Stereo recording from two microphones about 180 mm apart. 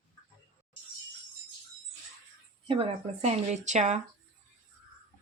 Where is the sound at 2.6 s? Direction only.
35° right (ahead or behind).